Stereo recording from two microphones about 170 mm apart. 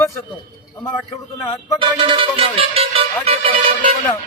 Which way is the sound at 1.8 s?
30° right (ahead or behind).